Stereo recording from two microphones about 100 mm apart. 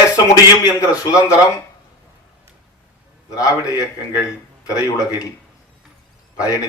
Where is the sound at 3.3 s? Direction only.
35° left (ahead or behind).